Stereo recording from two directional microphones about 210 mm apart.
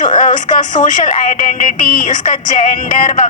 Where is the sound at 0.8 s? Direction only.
35° left (ahead or behind).